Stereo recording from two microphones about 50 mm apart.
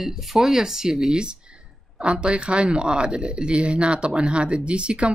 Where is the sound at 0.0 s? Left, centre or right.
Centre.